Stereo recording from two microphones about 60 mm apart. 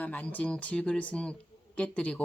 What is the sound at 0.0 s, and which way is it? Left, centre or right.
Speech, left.